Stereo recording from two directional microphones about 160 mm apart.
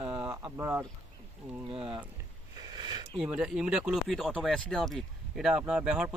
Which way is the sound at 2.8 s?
25° right (ahead or behind).